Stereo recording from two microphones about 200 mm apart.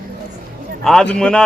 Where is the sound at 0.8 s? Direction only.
5° left (ahead or behind).